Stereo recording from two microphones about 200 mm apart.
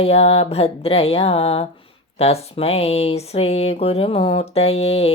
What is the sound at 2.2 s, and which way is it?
Speech, 30° left (ahead or behind).